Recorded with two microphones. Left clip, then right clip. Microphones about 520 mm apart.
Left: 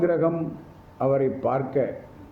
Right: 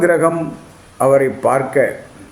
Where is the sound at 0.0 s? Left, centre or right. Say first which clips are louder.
Right 9 dB; left.